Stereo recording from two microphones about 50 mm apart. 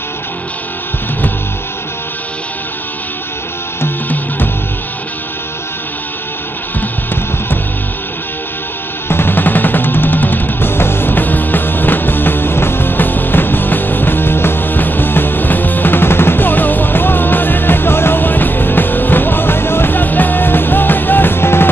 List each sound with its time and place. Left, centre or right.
9.1 s music: left